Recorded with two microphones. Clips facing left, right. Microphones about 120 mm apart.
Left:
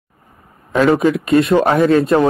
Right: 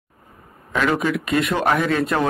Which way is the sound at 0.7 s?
35° left (ahead or behind).